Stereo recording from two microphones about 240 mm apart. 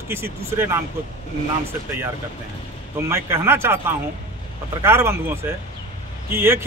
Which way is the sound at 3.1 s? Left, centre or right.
Centre.